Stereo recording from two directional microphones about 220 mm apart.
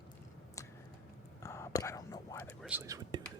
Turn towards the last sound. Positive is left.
turn(degrees=-15)  # may be behind; listen again after turning